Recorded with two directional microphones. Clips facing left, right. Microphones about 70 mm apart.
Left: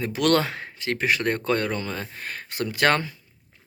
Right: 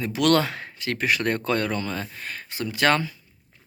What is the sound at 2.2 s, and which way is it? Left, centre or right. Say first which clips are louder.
Speech: left 2 dB; left.